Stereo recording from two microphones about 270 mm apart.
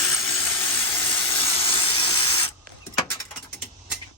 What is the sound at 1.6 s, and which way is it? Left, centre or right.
Steam, centre.